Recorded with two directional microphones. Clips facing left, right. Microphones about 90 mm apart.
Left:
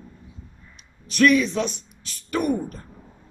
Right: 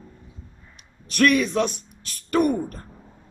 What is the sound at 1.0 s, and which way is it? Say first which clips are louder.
Speech: left 1 dB; 55° right (ahead or behind).